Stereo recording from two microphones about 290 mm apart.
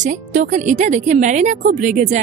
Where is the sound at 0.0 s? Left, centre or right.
Right.